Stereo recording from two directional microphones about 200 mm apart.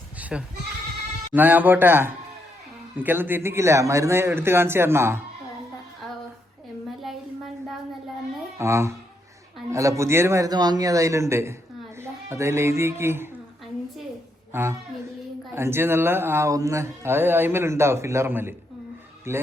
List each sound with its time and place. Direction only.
0.2 s goat: 5° right (ahead or behind)
1.3 s speech: 10° right (ahead or behind)
8.5 s speech: 15° right (ahead or behind)
14.5 s speech: 10° right (ahead or behind)